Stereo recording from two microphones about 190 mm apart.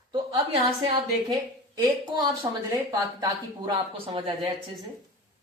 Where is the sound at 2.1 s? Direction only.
20° right (ahead or behind).